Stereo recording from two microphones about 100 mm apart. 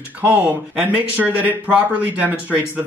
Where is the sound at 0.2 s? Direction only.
15° right (ahead or behind).